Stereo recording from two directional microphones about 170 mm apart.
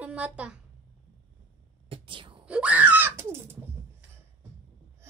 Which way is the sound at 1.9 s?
30° right (ahead or behind).